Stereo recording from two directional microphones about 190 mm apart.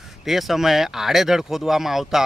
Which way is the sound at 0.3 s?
Centre (ahead or behind).